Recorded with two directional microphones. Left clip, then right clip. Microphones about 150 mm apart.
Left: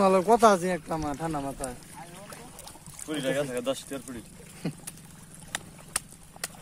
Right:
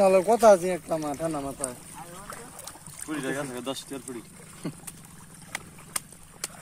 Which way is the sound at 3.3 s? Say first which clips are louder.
Left 6 dB; 40° left (ahead or behind).